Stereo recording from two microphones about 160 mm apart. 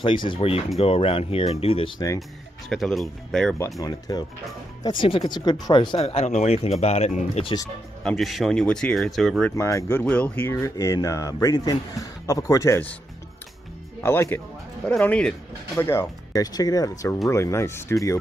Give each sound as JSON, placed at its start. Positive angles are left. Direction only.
{"t": 0.0, "sound": "speech", "side_deg": 30}
{"t": 2.7, "sound": "speech", "side_deg": 0}
{"t": 4.1, "sound": "speech", "side_deg": 25}
{"t": 7.4, "sound": "speech", "side_deg": 25}
{"t": 8.0, "sound": "speech", "side_deg": 0}
{"t": 9.6, "sound": "speech", "side_deg": 20}
{"t": 14.0, "sound": "speech", "side_deg": 15}